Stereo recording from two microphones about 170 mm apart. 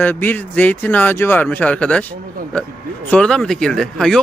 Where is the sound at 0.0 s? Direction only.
10° left (ahead or behind).